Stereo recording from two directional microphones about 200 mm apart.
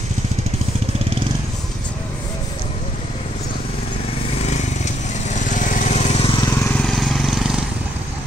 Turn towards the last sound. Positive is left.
turn(degrees=-5)  # may be behind; listen again after turning